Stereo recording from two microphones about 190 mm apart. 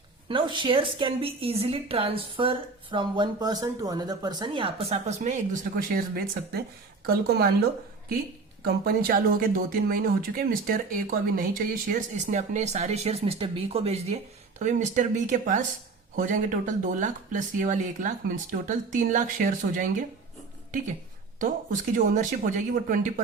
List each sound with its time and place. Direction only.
0.3 s a woman's voice: 25° right (ahead or behind)
5.7 s speech: 50° right (ahead or behind)
8.6 s speech: 55° right (ahead or behind)
21.3 s speech: 45° right (ahead or behind)